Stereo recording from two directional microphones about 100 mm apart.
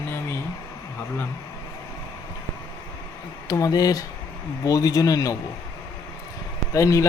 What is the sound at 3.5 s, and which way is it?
Speech, 35° left (ahead or behind).